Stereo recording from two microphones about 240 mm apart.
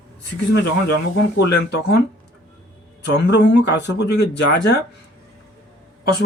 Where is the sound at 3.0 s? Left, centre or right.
Left.